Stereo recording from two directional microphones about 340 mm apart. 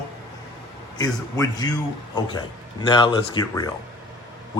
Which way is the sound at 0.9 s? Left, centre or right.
Centre.